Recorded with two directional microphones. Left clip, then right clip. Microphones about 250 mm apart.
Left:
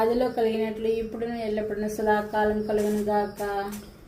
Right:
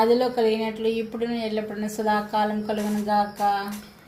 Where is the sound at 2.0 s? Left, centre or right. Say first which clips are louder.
Right 1 dB; right.